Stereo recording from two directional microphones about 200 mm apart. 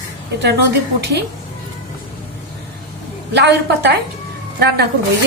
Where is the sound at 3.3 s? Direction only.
60° right (ahead or behind).